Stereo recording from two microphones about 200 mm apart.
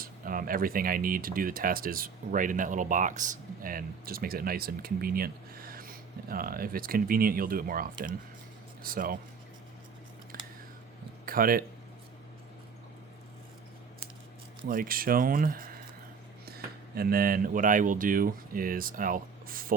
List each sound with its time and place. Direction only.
0.0 s speech: 45° right (ahead or behind)
10.3 s typing: 45° right (ahead or behind)
11.3 s speech: 45° right (ahead or behind)
14.7 s speech: 45° right (ahead or behind)